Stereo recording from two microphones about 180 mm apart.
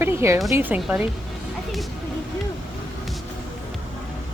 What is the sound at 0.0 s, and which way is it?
Speech, 15° right (ahead or behind).